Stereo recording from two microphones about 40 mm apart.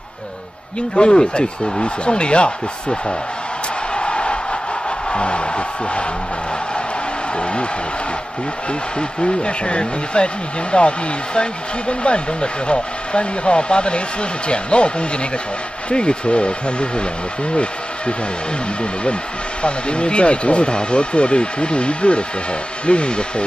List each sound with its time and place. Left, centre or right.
0.9 s speech: left
3.9 s a sound: left
5.1 s music: left
9.2 s speech: left
19.6 s speech: left